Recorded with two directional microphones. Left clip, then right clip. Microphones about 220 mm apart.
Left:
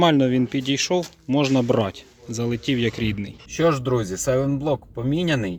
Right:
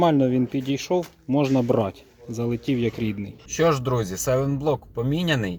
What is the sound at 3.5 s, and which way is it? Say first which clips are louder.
Speech: left 1 dB; 15° right (ahead or behind).